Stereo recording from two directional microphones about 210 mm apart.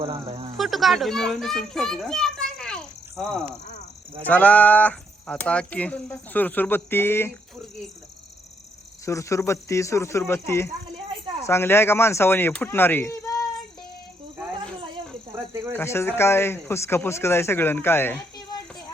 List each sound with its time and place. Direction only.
0.0 s speech: 25° right (ahead or behind)
0.5 s a child's voice: centre (ahead or behind)
9.0 s speech: 15° left (ahead or behind)
15.7 s speech: 10° left (ahead or behind)